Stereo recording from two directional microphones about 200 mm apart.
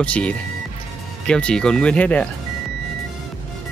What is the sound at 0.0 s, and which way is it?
Speech, 5° left (ahead or behind).